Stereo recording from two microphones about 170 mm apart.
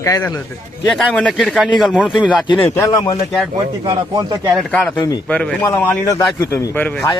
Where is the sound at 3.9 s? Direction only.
25° right (ahead or behind).